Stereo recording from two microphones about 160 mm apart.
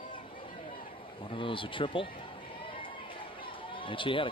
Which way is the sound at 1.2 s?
35° left (ahead or behind).